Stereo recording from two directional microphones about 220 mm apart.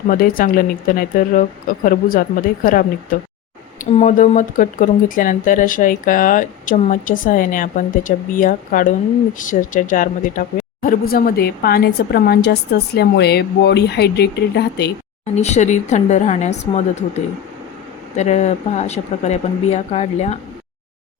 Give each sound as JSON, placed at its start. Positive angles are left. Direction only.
{"t": 0.1, "sound": "a woman's voice", "side_deg": 40}
{"t": 15.4, "sound": "speech", "side_deg": 30}